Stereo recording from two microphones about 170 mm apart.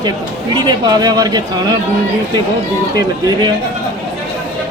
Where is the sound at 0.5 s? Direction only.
25° right (ahead or behind).